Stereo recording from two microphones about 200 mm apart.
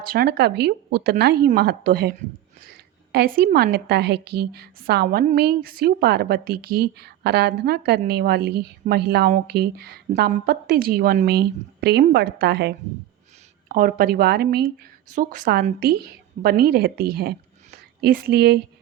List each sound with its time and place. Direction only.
0.0 s a woman's voice: 50° right (ahead or behind)
13.7 s a woman's voice: 45° right (ahead or behind)